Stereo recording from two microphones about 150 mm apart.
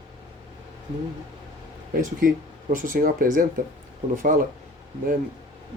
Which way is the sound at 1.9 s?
65° right (ahead or behind).